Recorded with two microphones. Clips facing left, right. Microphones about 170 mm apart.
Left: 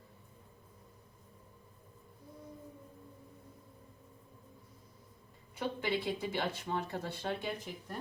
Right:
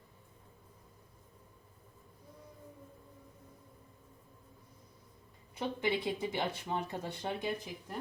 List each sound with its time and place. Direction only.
5.5 s speech: 20° right (ahead or behind)